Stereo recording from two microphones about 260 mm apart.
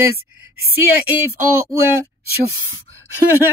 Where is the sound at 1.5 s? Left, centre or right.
Centre.